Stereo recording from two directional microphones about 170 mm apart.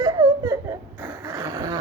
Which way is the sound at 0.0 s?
20° right (ahead or behind).